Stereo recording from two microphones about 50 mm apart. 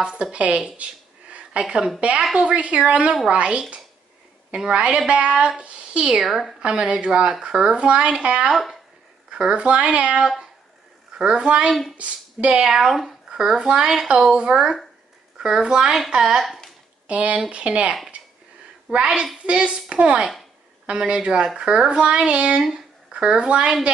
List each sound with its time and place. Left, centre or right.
0.0 s speech: centre
2.0 s speech: right
6.2 s speech: centre
6.6 s speech: centre
8.5 s speech: centre
9.3 s speech: centre
12.5 s speech: centre
17.1 s speech: right
22.6 s speech: centre